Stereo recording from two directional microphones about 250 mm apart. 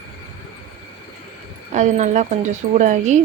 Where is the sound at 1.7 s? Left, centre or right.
Right.